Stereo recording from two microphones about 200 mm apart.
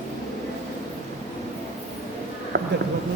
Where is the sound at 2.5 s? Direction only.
55° right (ahead or behind).